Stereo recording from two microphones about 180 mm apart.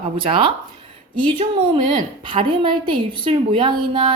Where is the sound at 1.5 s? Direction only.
25° right (ahead or behind).